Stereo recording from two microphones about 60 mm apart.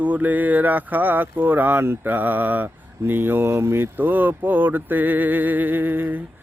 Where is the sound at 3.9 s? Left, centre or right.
Right.